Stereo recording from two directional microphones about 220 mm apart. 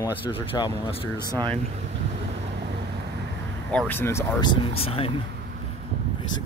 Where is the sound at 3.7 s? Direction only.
10° left (ahead or behind); by 5.1 s 25° left (ahead or behind).